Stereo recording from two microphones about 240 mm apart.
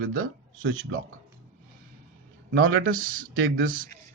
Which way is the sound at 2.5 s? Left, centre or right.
Right.